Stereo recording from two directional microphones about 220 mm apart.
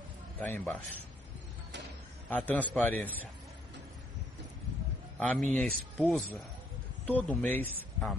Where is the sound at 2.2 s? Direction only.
5° left (ahead or behind).